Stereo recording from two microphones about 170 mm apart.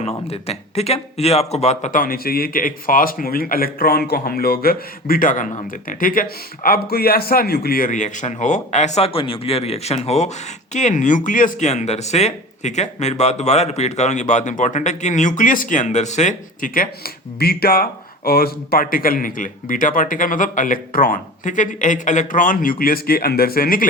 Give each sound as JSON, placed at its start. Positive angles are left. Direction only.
{"t": 0.3, "sound": "speech", "side_deg": 40}